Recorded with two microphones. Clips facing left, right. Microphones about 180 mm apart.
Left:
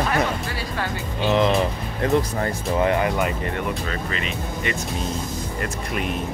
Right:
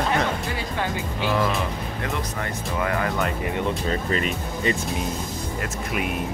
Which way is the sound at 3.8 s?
35° right (ahead or behind).